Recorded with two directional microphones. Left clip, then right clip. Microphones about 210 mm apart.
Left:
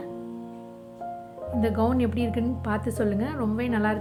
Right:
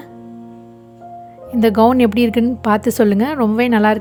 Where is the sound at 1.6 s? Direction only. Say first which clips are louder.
Right 14 dB; 45° right (ahead or behind).